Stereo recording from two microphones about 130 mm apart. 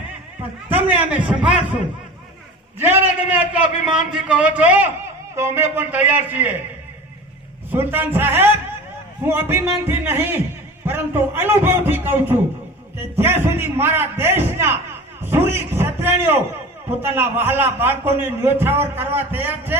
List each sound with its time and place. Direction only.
0.7 s a man's voice: 10° right (ahead or behind)
7.7 s a man's voice: 15° right (ahead or behind)